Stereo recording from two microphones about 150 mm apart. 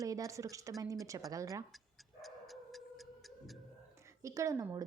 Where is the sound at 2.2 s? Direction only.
Centre (ahead or behind).